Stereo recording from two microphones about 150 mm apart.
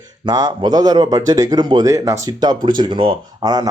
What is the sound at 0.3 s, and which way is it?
Speech, 30° right (ahead or behind).